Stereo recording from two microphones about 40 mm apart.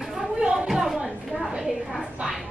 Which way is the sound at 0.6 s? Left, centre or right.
Centre.